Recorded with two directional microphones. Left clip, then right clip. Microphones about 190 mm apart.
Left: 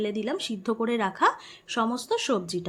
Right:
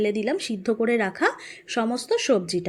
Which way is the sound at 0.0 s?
10° right (ahead or behind).